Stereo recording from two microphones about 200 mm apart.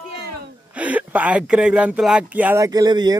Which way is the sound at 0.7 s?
5° right (ahead or behind).